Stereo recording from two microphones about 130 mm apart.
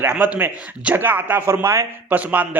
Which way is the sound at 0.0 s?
15° right (ahead or behind).